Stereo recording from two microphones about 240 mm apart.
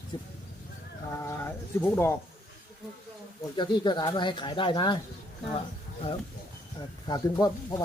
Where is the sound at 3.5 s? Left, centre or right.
Centre.